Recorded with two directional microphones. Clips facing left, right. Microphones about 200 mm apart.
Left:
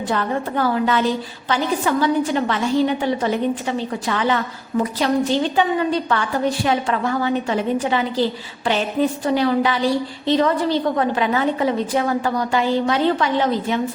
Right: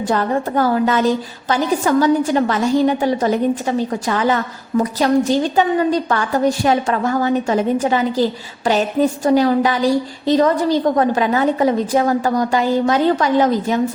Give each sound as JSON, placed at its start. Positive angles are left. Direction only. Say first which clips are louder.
{"t": 0.1, "sound": "a woman's voice", "louder": "right 4 dB", "side_deg": -40}